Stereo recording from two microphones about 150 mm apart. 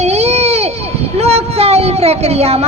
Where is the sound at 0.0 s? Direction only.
45° right (ahead or behind).